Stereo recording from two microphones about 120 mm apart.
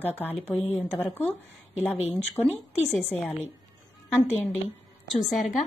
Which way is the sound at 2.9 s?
15° left (ahead or behind).